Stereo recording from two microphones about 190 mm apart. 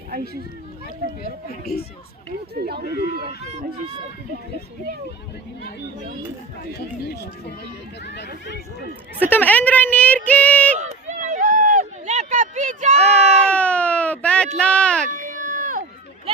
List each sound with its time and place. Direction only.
1.2 s speech: 55° left (ahead or behind)
2.6 s speech: 55° right (ahead or behind)
3.4 s speech: 30° right (ahead or behind)
6.7 s speech: 60° left (ahead or behind)
9.3 s a woman's voice: 10° left (ahead or behind)
10.2 s child singing: 5° left (ahead or behind)
10.8 s a sound: 40° right (ahead or behind)
13.0 s a sound: 5° left (ahead or behind)
15.1 s a sound: 40° right (ahead or behind)